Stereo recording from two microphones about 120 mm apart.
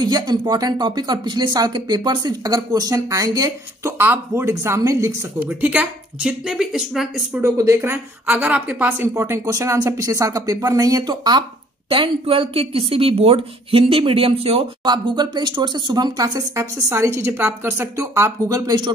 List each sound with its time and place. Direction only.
0.0 s speech: 35° right (ahead or behind)
5.5 s speech: 10° right (ahead or behind)
7.4 s speech: 25° right (ahead or behind)
9.1 s speech: 25° right (ahead or behind)
11.9 s a woman's voice: 45° right (ahead or behind)
14.8 s speech: 35° right (ahead or behind)